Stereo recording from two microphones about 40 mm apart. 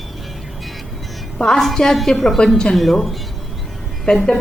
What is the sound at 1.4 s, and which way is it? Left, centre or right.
A woman's voice, centre.